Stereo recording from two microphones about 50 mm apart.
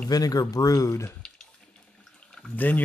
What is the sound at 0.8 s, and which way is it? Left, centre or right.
Speech, left.